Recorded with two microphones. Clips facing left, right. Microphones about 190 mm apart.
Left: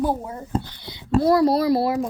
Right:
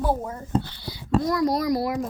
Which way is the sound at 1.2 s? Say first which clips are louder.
Left 8 dB; 30° left (ahead or behind).